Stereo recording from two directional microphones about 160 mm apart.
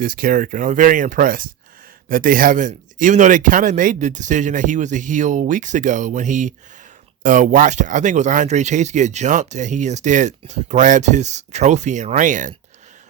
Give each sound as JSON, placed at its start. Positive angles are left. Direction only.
{"t": 0.0, "sound": "speech", "side_deg": -60}